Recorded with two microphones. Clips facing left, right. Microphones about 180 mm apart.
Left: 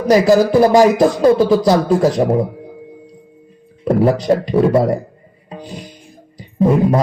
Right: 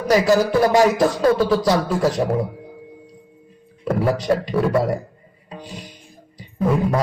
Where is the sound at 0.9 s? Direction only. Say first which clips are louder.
Left 5 dB; 15° left (ahead or behind).